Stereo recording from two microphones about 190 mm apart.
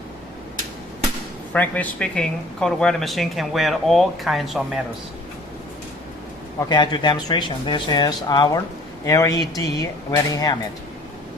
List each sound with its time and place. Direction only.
1.5 s speech: 10° left (ahead or behind)
6.6 s speech: 20° left (ahead or behind)